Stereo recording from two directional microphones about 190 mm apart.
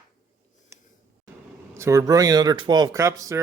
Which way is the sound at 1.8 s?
15° right (ahead or behind).